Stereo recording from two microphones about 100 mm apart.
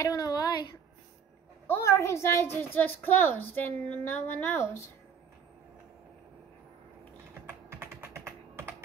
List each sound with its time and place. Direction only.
0.0 s a sound: 40° left (ahead or behind)
1.7 s a woman's voice: 30° left (ahead or behind)
7.7 s typing: 25° right (ahead or behind)